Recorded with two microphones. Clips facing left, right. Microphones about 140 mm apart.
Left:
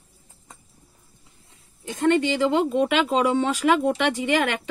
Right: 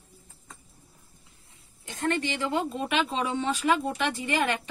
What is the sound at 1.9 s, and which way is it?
Speech, 90° left.